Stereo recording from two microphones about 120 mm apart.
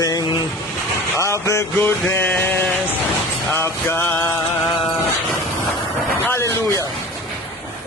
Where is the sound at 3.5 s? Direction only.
20° left (ahead or behind).